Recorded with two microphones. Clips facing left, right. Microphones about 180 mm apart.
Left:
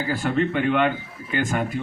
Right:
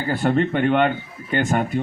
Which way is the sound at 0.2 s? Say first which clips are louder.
Right 5 dB; 50° right (ahead or behind).